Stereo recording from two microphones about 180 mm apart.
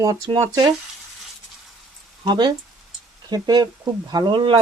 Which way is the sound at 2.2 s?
25° right (ahead or behind).